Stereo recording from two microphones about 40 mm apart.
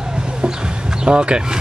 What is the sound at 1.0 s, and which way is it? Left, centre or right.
Speech, right.